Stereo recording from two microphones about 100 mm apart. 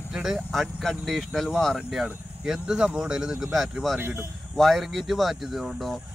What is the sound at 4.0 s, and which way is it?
Speech, 20° right (ahead or behind).